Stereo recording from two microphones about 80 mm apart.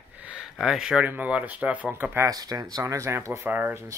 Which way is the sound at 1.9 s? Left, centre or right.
Right.